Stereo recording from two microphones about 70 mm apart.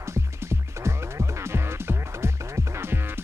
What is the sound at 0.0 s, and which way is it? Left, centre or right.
Music, right.